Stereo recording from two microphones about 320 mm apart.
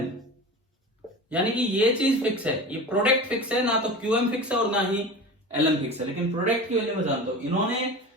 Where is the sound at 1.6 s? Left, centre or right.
Centre.